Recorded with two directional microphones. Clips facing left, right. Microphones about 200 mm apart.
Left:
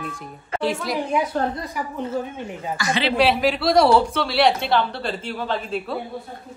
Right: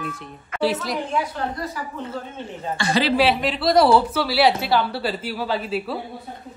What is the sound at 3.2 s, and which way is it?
Speech, centre (ahead or behind).